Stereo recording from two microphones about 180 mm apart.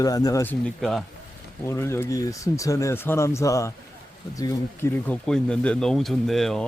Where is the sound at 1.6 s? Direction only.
15° left (ahead or behind).